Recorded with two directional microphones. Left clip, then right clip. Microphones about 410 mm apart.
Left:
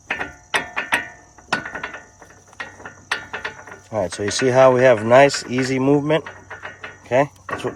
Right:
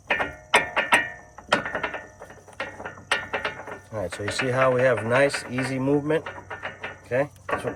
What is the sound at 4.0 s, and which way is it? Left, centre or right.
Speech, centre.